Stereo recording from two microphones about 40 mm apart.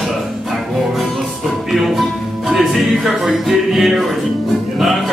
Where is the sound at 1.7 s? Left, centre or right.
Centre.